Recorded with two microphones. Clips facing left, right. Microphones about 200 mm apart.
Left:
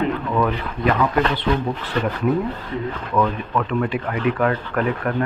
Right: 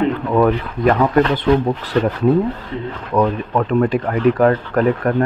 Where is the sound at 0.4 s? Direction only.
50° right (ahead or behind).